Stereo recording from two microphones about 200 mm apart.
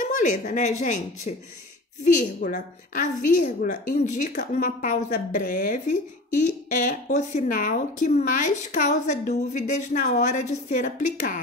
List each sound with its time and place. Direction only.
0.0 s a woman's voice: 40° left (ahead or behind)